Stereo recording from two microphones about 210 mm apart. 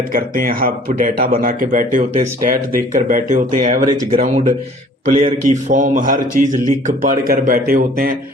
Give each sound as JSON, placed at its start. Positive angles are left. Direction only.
{"t": 0.1, "sound": "a man's voice", "side_deg": -45}